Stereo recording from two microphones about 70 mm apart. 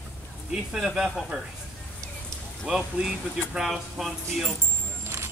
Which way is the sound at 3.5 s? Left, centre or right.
Centre.